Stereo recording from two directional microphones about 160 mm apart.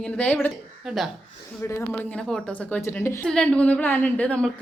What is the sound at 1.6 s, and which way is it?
A woman's voice, 15° left (ahead or behind).